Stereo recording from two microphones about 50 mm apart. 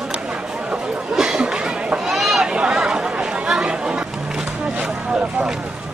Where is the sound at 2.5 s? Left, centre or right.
Centre.